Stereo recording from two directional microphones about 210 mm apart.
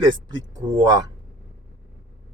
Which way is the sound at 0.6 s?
15° right (ahead or behind).